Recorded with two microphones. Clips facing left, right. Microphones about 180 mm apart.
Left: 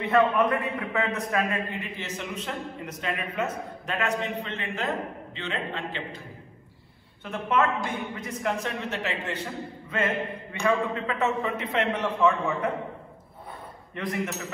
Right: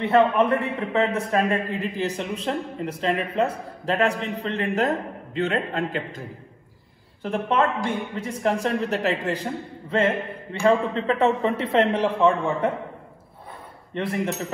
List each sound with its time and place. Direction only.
0.0 s a man's voice: 30° right (ahead or behind)
7.2 s speech: 30° right (ahead or behind)
13.9 s speech: 30° right (ahead or behind)